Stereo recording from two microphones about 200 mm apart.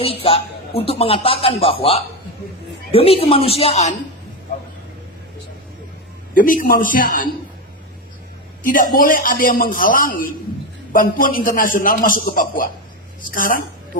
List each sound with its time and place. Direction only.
0.0 s speech: 30° left (ahead or behind)
6.3 s a man's voice: 45° left (ahead or behind)
8.6 s a man's voice: 45° left (ahead or behind)